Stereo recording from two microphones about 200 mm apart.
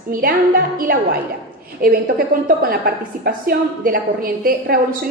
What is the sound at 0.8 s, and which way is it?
A woman's voice, 45° right (ahead or behind).